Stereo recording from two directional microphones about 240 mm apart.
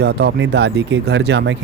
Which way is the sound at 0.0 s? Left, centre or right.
Right.